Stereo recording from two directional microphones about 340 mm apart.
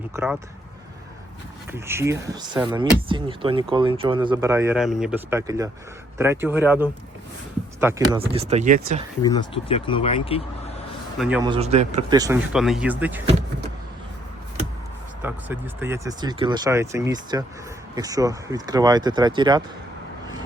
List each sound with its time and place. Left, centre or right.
0.1 s speech: centre
1.7 s speech: centre
9.2 s speech: centre
11.2 s speech: centre
11.5 s speech: centre
15.2 s speech: centre